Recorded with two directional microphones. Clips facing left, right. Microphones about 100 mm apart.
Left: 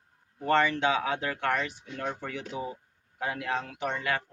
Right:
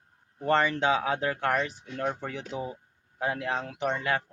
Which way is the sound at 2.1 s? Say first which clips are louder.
Right 2 dB; 15° right (ahead or behind).